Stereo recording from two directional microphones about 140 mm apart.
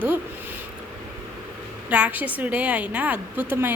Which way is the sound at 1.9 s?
10° right (ahead or behind).